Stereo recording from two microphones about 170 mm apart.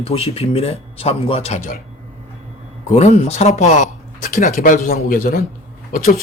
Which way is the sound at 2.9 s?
40° left (ahead or behind).